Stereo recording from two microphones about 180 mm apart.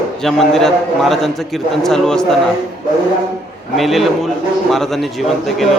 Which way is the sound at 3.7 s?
Centre (ahead or behind).